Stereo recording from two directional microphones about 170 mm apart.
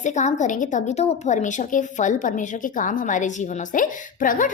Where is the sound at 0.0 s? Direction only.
45° left (ahead or behind).